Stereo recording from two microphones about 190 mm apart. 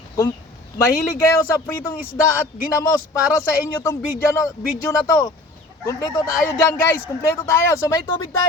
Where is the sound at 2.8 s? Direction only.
15° left (ahead or behind).